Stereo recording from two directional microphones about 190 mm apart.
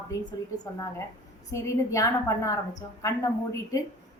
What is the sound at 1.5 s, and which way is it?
A woman's voice, 15° left (ahead or behind).